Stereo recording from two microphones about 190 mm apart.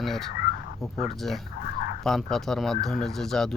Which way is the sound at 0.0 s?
Centre (ahead or behind).